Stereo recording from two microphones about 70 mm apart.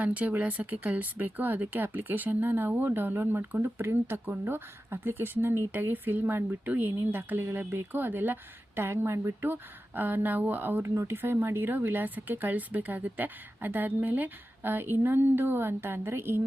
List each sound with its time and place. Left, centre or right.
0.0 s speech: right